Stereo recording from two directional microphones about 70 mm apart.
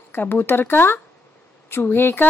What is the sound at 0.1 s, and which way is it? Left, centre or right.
A woman's voice, left.